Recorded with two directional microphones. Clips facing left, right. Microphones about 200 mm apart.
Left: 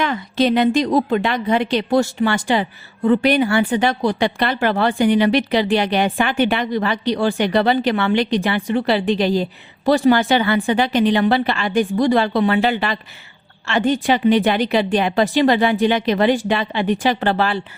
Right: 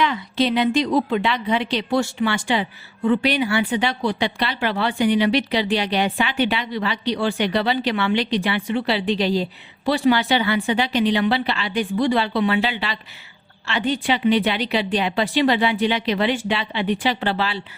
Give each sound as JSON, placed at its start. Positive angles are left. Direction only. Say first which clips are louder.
{"t": 0.0, "sound": "a woman's voice", "louder": "left 2 dB", "side_deg": 50}